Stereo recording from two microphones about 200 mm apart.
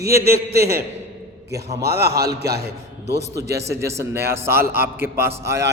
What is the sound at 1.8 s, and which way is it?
A man's voice, 50° right (ahead or behind).